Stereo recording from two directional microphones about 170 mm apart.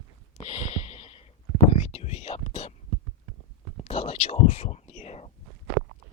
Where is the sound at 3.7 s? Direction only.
35° left (ahead or behind).